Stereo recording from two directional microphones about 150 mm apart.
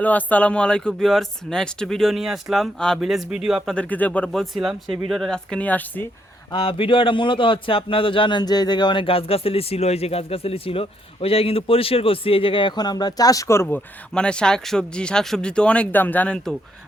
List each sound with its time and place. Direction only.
0.0 s speech: 10° left (ahead or behind)
3.8 s speech: 10° left (ahead or behind)
6.5 s a man's voice: 35° left (ahead or behind); by 16.6 s 5° left (ahead or behind)